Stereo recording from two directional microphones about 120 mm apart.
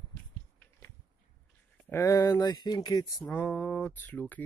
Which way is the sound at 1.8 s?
20° left (ahead or behind).